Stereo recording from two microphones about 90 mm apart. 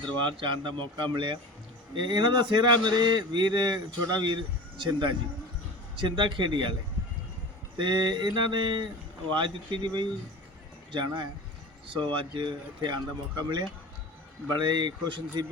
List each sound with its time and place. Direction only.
0.2 s speech: 65° right (ahead or behind)
7.8 s speech: 60° right (ahead or behind)